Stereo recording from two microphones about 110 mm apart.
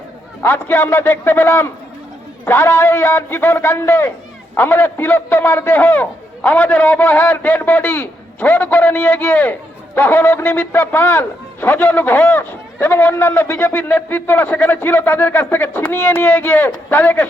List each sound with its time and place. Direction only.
0.4 s a man's voice: 20° left (ahead or behind)